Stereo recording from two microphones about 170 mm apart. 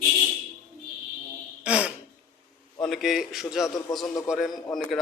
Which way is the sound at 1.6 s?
5° right (ahead or behind).